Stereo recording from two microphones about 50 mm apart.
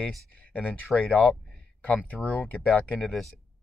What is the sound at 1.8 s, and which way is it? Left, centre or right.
Speech, left.